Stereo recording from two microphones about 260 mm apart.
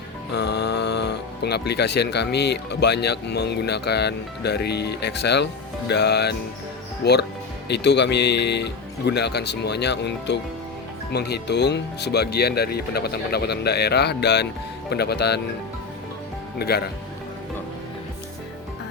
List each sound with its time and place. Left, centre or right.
0.3 s speech: left
16.6 s speech: left